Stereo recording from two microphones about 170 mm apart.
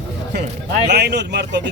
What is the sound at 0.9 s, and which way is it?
Speech, 80° right.